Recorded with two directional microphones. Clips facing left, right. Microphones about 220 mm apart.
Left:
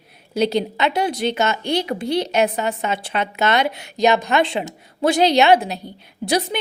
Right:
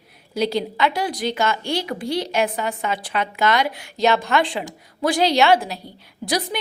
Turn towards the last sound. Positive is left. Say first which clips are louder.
# left 3 dB
turn(degrees=25)  # may be behind; listen again after turning